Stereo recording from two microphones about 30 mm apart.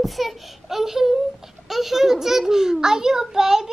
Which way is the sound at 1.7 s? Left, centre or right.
Centre.